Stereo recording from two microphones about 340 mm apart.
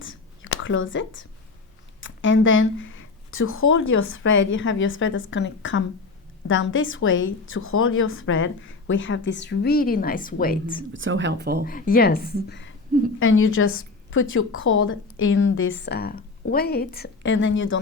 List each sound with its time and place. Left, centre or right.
0.0 s a sound: left
2.0 s a woman's voice: left
10.9 s speech: right
11.6 s a woman's voice: left